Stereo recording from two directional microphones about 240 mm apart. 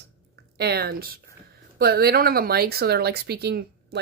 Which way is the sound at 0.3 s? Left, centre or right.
Right.